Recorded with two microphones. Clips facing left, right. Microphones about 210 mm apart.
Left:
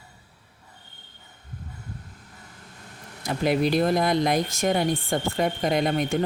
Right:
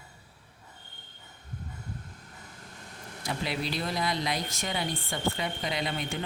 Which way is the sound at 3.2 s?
50° left (ahead or behind).